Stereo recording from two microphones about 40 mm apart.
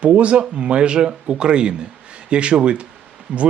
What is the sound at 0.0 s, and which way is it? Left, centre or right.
Speech, right.